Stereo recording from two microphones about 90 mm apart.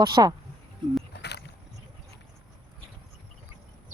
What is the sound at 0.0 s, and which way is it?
Speech, 50° right (ahead or behind).